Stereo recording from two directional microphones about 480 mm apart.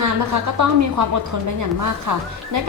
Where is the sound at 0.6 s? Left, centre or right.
Right.